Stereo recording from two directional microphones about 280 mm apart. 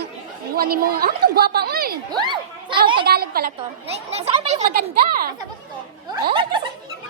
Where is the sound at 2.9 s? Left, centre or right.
Right.